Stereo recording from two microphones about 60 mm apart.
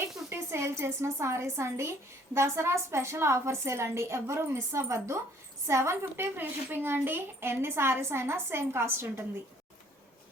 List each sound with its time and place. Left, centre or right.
0.3 s a woman's voice: right
6.3 s a woman's voice: right